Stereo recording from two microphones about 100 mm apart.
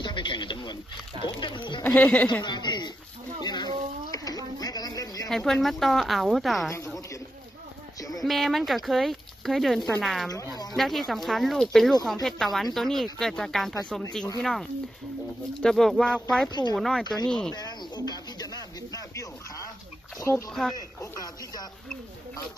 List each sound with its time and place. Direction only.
0.0 s a sound: 55° left (ahead or behind)
1.2 s speech: 50° left (ahead or behind)
2.0 s a woman's voice: 15° left (ahead or behind)
2.4 s a sound: 45° left (ahead or behind)
5.3 s speech: centre (ahead or behind)
8.2 s speech: centre (ahead or behind)
10.3 s a sound: 40° left (ahead or behind)
10.8 s speech: centre (ahead or behind)
16.4 s speech: 45° left (ahead or behind)
16.7 s speech: centre (ahead or behind)
17.0 s speech: 45° left (ahead or behind)
17.5 s a sound: 45° left (ahead or behind)
20.3 s speech: 30° left (ahead or behind)
20.7 s speech: 40° left (ahead or behind)